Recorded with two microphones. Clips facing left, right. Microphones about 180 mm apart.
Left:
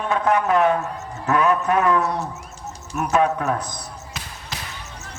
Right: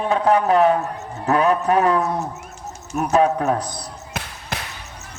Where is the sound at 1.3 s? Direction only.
35° right (ahead or behind).